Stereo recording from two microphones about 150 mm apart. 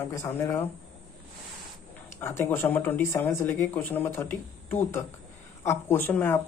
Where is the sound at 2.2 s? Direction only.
15° left (ahead or behind).